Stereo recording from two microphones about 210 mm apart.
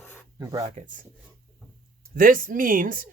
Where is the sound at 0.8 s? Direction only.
40° right (ahead or behind).